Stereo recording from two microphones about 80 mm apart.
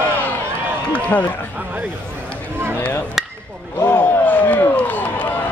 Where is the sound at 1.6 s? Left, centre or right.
Right.